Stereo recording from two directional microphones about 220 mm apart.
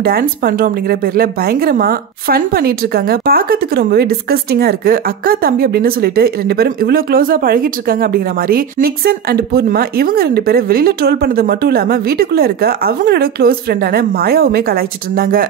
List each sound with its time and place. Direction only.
0.0 s a woman's voice: 40° right (ahead or behind)